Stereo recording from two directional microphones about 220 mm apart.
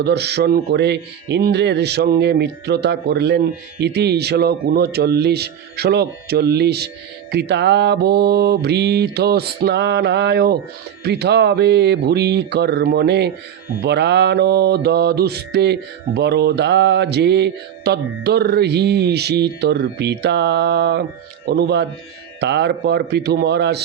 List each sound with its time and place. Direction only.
0.0 s speech: 50° right (ahead or behind)